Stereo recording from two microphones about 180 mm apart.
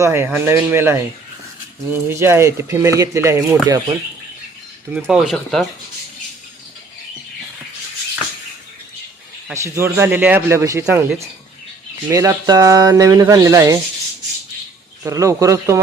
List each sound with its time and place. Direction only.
0.0 s speech: 15° right (ahead or behind)
4.9 s speech: 5° right (ahead or behind)
9.5 s speech: 15° right (ahead or behind)
15.0 s speech: 20° right (ahead or behind)